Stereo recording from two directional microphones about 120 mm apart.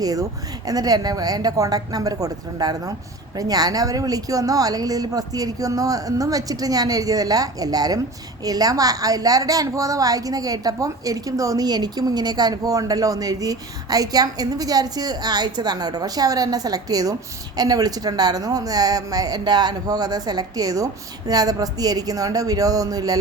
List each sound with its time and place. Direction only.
0.0 s a woman's voice: 30° right (ahead or behind)